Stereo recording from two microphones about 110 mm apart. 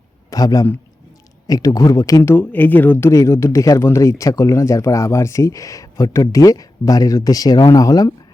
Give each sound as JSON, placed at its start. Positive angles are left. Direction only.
{"t": 0.3, "sound": "a man's voice", "side_deg": 35}
{"t": 2.3, "sound": "speech", "side_deg": 15}